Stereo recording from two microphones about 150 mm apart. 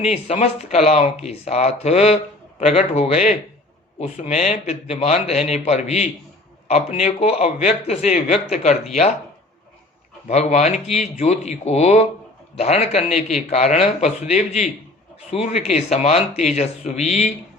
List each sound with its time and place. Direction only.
0.1 s speech: 45° left (ahead or behind)
10.2 s speech: 50° left (ahead or behind)